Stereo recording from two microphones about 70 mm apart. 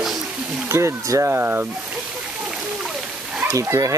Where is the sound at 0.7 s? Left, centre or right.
Right.